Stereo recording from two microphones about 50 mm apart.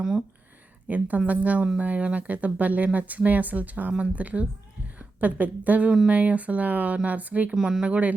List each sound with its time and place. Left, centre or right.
0.9 s speech: right
7.5 s speech: centre